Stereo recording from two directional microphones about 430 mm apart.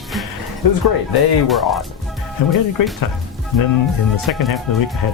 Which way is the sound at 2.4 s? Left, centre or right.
Left.